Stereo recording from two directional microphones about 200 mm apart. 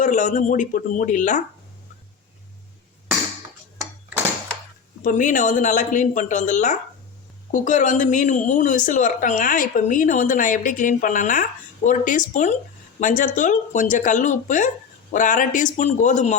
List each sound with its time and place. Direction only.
0.0 s a woman's voice: 40° left (ahead or behind)
5.0 s a woman's voice: 40° left (ahead or behind)